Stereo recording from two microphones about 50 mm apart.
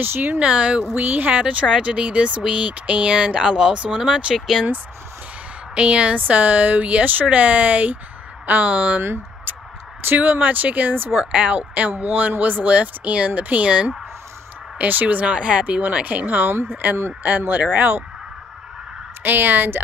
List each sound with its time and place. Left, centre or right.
0.0 s speech: right
0.4 s speech: right
0.9 s speech: right
1.8 s speech: right
5.8 s speech: right
10.0 s speech: right
11.1 s speech: right
14.8 s speech: right
16.5 s speech: right
17.2 s speech: right
19.2 s speech: right